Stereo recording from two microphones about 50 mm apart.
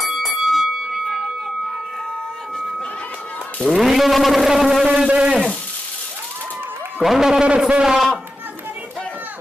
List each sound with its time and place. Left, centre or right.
0.0 s a sound: centre
3.7 s vehicle: centre
4.8 s speech: centre
7.0 s speech: centre
7.4 s speech: right